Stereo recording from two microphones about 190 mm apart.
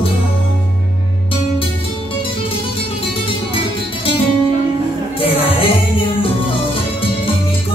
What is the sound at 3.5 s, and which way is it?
Music, 30° left (ahead or behind).